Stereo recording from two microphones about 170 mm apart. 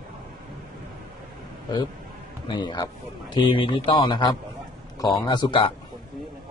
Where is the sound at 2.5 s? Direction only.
25° left (ahead or behind).